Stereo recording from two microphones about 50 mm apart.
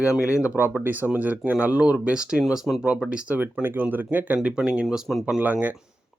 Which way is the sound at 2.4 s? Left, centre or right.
Centre.